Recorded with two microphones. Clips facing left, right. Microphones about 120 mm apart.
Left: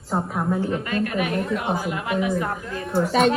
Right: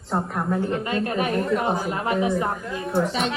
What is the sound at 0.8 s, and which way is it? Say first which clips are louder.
A woman's voice: even; 25° right (ahead or behind).